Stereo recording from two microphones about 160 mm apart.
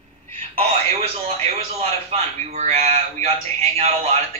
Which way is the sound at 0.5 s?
40° right (ahead or behind).